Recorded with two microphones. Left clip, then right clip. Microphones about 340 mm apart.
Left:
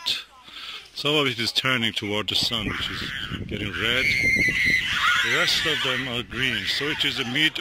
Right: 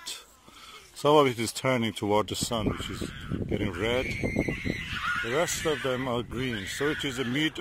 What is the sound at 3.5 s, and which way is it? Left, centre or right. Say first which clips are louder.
Speech: left 5 dB; centre.